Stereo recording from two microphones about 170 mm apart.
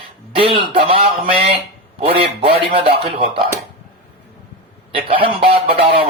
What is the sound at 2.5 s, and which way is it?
Speech, 30° right (ahead or behind).